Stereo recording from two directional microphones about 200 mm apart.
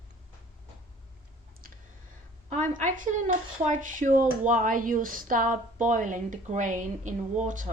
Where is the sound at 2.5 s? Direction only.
40° right (ahead or behind).